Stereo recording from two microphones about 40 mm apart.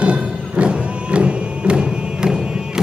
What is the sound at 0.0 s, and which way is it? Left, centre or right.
Music, right.